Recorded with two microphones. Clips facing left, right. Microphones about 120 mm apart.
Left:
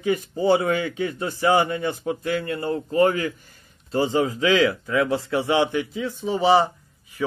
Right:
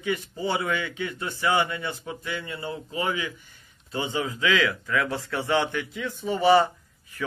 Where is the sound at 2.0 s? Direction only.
50° left (ahead or behind); by 5.8 s 25° left (ahead or behind).